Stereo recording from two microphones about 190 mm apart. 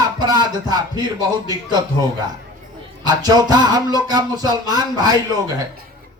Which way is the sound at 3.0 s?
20° right (ahead or behind).